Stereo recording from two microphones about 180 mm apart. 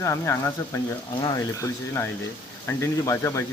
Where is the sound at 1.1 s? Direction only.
25° left (ahead or behind).